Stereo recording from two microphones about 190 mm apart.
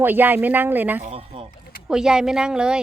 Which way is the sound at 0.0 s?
10° right (ahead or behind).